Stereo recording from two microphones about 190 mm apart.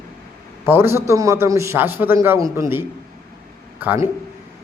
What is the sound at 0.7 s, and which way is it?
Speech, 15° right (ahead or behind).